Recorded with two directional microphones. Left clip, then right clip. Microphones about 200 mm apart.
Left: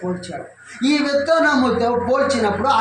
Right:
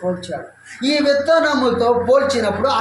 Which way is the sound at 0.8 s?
20° right (ahead or behind).